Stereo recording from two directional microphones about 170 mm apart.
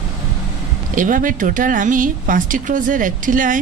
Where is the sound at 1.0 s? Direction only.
50° right (ahead or behind).